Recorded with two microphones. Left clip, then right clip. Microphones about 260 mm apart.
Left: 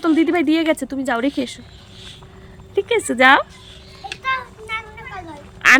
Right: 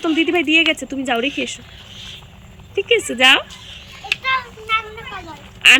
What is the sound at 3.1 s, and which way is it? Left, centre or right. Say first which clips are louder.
Speech: left 2 dB; centre.